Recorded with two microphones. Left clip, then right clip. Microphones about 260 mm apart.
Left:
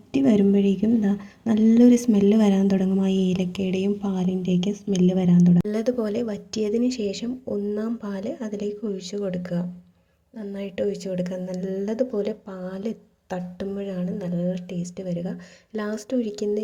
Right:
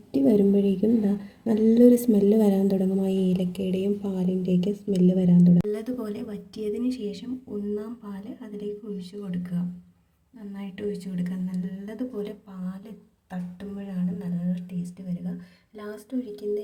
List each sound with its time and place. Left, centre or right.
0.1 s speech: left